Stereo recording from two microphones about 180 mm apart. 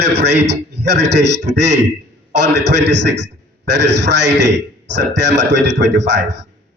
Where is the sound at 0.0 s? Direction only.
75° right (ahead or behind).